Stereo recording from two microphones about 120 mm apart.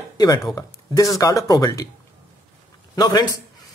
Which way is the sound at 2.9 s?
35° left (ahead or behind).